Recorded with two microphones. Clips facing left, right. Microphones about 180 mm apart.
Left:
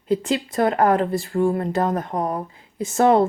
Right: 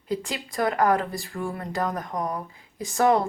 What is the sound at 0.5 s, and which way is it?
Speech, 30° left (ahead or behind).